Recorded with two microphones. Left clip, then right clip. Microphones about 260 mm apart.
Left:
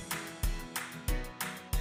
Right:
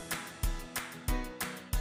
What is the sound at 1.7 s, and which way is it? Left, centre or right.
Music, centre.